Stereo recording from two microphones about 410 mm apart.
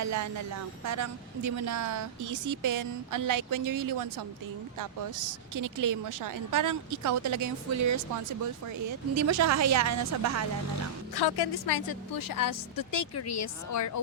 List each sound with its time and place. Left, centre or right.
0.0 s a woman's voice: right
11.1 s a woman's voice: left